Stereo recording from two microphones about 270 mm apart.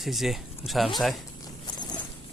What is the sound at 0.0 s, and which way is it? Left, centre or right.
Speech, centre.